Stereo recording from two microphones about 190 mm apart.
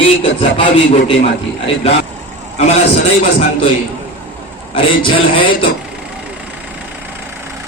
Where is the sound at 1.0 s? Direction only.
30° left (ahead or behind).